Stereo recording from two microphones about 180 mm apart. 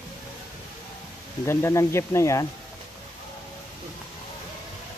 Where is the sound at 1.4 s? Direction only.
15° left (ahead or behind).